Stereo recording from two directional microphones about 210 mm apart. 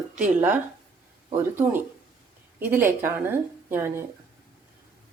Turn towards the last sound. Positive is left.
turn(degrees=-10)  # may be behind; listen again after turning